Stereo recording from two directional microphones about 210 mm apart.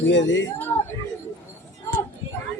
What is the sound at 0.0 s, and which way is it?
Speech, 60° left (ahead or behind).